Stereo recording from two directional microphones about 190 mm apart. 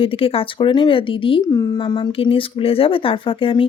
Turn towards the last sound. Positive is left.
turn(degrees=25)  # may be behind; listen again after turning